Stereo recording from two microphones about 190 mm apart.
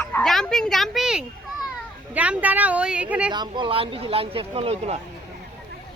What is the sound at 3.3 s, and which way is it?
Speech, 25° right (ahead or behind).